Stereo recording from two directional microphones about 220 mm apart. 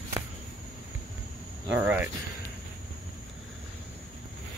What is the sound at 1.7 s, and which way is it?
Cricket, 5° right (ahead or behind).